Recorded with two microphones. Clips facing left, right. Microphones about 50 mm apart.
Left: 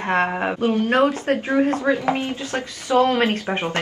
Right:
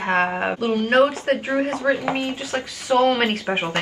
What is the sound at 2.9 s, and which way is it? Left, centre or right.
Speech, centre.